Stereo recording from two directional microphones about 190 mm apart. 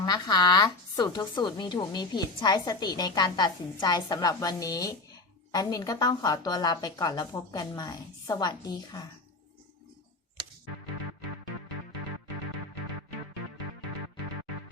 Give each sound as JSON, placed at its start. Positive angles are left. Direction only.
{"t": 0.0, "sound": "speech", "side_deg": 20}